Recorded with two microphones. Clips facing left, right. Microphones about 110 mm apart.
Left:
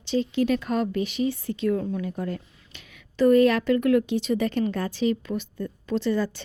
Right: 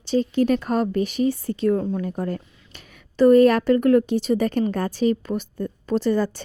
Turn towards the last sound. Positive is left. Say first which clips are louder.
# right 4 dB
turn(degrees=-45)  # may be behind; listen again after turning